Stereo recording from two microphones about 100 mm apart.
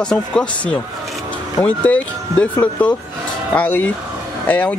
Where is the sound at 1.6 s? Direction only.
15° left (ahead or behind).